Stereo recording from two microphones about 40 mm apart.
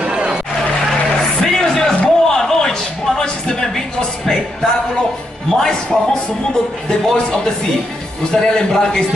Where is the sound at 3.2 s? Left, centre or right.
Centre.